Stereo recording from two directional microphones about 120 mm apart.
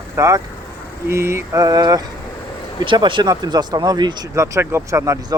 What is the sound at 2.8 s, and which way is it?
Speech, 45° right (ahead or behind).